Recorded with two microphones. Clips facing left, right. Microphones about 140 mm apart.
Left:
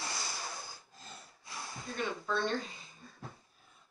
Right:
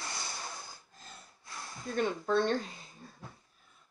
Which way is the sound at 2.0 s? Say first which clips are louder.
Right 6 dB; 40° right (ahead or behind).